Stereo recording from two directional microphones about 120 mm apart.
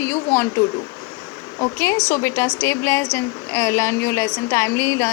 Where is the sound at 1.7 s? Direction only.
20° left (ahead or behind).